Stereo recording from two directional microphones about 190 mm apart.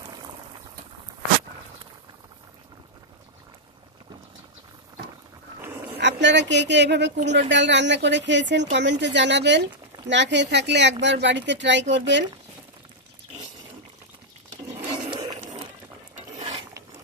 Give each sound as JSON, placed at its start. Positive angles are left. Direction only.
{"t": 0.0, "sound": "boiling", "side_deg": -25}
{"t": 5.9, "sound": "speech", "side_deg": -65}
{"t": 15.0, "sound": "a sound", "side_deg": -30}
{"t": 16.3, "sound": "ratchet", "side_deg": -30}